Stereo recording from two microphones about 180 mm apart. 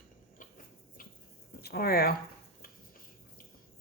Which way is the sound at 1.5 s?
60° left (ahead or behind).